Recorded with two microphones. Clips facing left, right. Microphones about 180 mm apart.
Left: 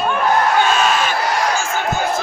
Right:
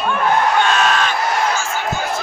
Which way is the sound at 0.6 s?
5° left (ahead or behind).